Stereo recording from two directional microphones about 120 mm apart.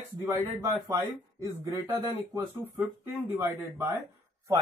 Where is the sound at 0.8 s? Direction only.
25° right (ahead or behind).